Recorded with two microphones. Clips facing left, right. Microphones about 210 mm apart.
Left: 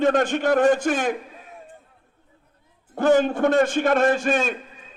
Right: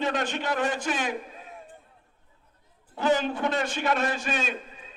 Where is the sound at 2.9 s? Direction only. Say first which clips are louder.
Left 7 dB; 50° left (ahead or behind).